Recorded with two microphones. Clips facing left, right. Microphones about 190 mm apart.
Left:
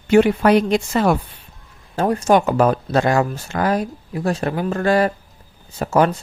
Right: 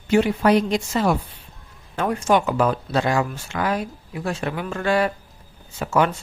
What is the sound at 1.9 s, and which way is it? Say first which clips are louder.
Speech: left 4 dB; 35° left (ahead or behind).